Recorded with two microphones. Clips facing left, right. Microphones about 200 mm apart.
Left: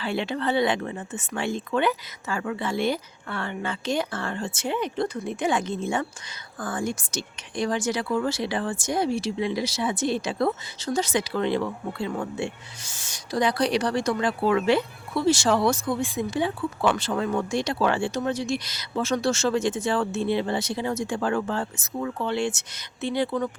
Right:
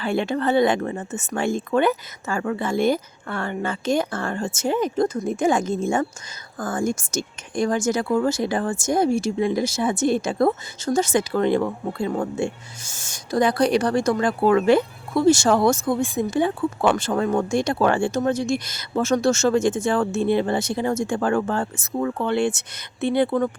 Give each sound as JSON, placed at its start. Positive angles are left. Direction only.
{"t": 0.0, "sound": "speech", "side_deg": -50}